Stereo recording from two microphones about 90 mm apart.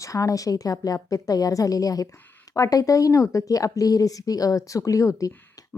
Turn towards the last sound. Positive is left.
turn(degrees=40)  # may be behind; listen again after turning